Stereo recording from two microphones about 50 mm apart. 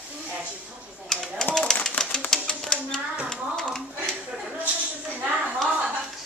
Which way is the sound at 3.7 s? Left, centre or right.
Centre.